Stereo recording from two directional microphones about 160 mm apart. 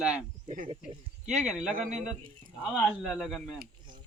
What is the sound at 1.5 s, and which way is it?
Speech, centre (ahead or behind).